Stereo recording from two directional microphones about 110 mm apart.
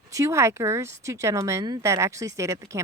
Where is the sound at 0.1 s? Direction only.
30° right (ahead or behind).